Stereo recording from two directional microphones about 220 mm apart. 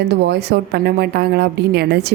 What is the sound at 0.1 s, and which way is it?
A woman's voice, 50° right (ahead or behind).